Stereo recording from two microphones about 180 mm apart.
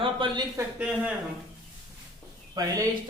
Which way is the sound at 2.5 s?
20° right (ahead or behind).